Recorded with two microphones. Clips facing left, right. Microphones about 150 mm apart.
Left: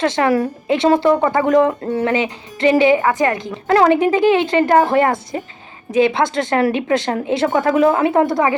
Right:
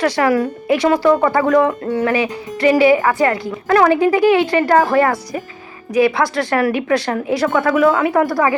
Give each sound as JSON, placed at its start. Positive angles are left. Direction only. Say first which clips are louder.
{"t": 0.0, "sound": "speech", "louder": "right 1 dB", "side_deg": 25}